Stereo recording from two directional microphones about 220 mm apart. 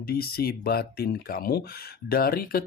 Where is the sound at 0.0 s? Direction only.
45° left (ahead or behind).